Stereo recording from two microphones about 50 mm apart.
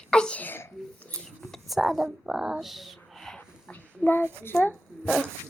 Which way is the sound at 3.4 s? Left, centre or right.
Left.